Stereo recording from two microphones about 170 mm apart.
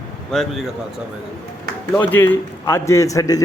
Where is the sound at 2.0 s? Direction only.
10° left (ahead or behind).